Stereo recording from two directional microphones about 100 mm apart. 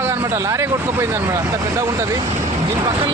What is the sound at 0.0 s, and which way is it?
A man's voice, 25° right (ahead or behind).